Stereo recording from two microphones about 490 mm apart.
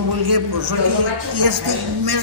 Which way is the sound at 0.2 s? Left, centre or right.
Right.